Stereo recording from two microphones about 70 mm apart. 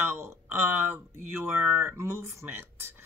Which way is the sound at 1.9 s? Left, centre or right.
Right.